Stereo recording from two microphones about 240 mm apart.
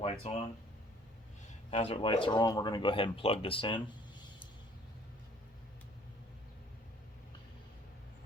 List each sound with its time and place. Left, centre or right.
0.0 s speech: left
1.7 s speech: left